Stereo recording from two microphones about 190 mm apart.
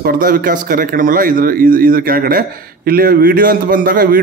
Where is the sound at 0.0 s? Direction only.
50° right (ahead or behind).